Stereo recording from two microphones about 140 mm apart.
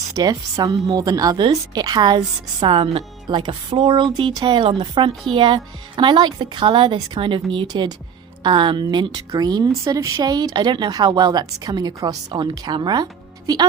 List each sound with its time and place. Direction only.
0.1 s a woman's voice: 25° right (ahead or behind)